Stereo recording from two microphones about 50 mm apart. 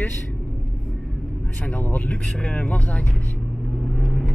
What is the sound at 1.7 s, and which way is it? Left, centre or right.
Speech, left.